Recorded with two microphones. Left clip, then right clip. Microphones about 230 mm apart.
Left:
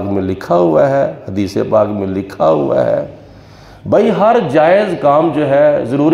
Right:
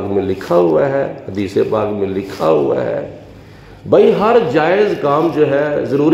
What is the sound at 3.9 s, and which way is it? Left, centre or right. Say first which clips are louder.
A man's voice: even; left.